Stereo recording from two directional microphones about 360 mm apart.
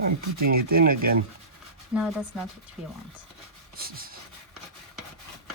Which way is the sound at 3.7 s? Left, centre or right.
Right.